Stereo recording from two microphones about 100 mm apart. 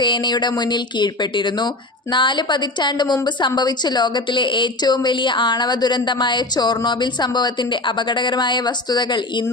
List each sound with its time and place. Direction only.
0.0 s a woman's voice: 50° left (ahead or behind)